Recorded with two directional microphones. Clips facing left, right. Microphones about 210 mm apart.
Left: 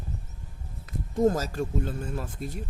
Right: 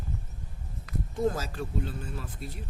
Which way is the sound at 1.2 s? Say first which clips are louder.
Left 6 dB; 45° left (ahead or behind).